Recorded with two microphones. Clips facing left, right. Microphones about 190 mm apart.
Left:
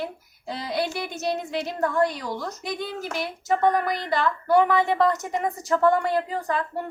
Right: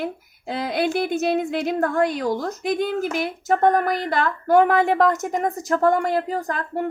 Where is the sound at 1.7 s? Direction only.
50° right (ahead or behind).